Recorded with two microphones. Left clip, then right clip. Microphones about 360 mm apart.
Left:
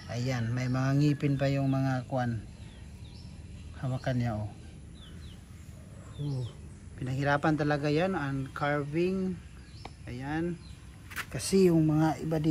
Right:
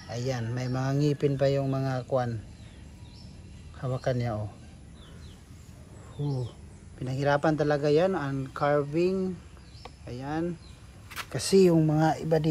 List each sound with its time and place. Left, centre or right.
0.1 s speech: centre
3.8 s speech: centre
7.0 s speech: centre
11.3 s speech: right